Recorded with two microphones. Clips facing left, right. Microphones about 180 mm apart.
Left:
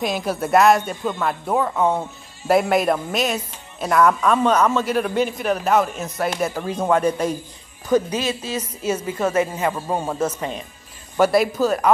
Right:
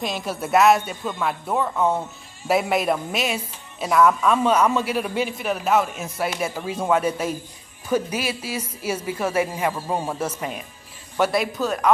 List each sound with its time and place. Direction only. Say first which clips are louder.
0.0 s a man's voice: left 4 dB; centre (ahead or behind)
11.1 s a man's voice: left 5 dB; centre (ahead or behind)